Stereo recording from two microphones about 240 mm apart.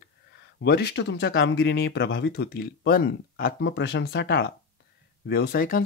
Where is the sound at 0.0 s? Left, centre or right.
Left.